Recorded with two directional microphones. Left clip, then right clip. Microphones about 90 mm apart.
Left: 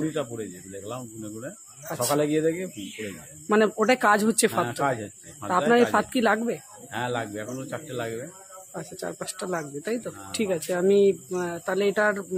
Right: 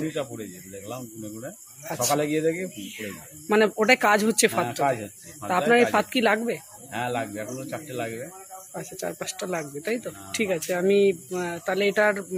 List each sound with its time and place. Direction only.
0.0 s speech: 15° left (ahead or behind)
8.7 s speech: 5° left (ahead or behind)